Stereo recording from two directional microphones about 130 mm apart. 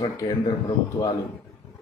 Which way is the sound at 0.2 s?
25° left (ahead or behind).